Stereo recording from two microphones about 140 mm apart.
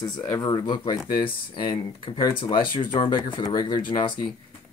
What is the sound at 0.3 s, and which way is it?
Speech, 30° left (ahead or behind).